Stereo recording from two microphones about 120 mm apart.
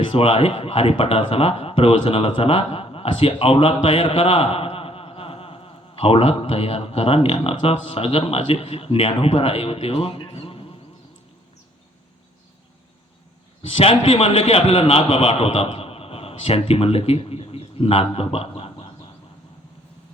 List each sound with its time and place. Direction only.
0.1 s a man's voice: 50° left (ahead or behind)
10.2 s a sound: 55° left (ahead or behind)
13.6 s a man's voice: 50° left (ahead or behind)